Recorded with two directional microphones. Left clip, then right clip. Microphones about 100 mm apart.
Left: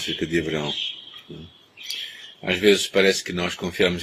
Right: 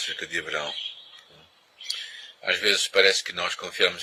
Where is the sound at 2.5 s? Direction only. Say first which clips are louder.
Left 4 dB; 40° right (ahead or behind).